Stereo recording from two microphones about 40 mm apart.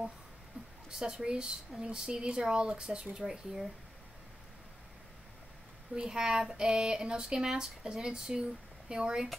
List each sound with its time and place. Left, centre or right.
1.0 s speech: right
3.2 s speech: centre
5.9 s speech: centre